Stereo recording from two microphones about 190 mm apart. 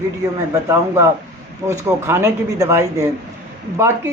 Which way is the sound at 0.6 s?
15° right (ahead or behind).